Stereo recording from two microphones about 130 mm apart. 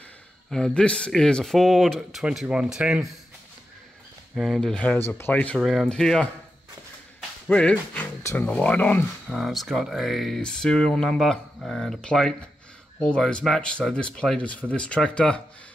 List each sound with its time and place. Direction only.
0.5 s speech: 5° left (ahead or behind)
4.4 s speech: 5° left (ahead or behind)
5.6 s speech: centre (ahead or behind)
7.2 s music: 10° left (ahead or behind)
8.2 s speech: 20° left (ahead or behind)
9.3 s speech: centre (ahead or behind)